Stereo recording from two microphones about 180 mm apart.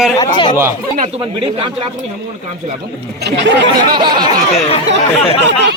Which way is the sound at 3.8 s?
25° right (ahead or behind).